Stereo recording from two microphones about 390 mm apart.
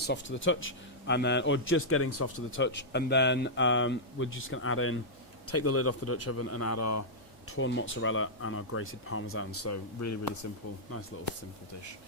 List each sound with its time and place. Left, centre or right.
0.0 s speech: left
7.4 s speech: left
11.7 s speech: left